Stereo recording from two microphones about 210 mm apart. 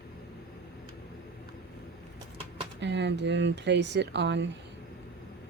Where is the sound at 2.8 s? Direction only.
55° right (ahead or behind).